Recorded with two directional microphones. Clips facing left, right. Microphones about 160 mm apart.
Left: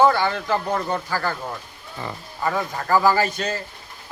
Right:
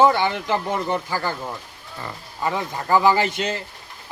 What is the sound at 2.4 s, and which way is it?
Speech, 20° right (ahead or behind).